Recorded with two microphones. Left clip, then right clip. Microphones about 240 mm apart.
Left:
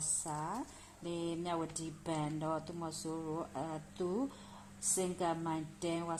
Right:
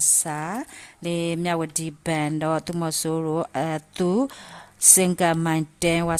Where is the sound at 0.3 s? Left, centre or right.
Right.